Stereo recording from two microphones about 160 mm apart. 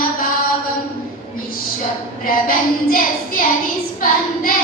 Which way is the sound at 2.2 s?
65° left (ahead or behind).